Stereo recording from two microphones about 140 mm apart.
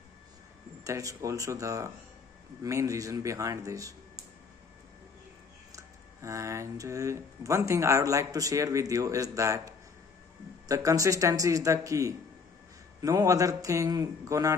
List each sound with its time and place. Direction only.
0.8 s speech: 25° right (ahead or behind)
5.7 s speech: 20° right (ahead or behind)